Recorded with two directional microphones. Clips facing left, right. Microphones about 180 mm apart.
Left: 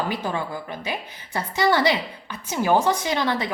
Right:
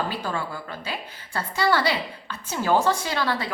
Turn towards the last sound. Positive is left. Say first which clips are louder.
# left 3 dB
turn(degrees=20)  # may be behind; listen again after turning